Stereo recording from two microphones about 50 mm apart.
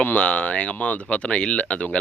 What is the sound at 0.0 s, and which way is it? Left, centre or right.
Speech, left.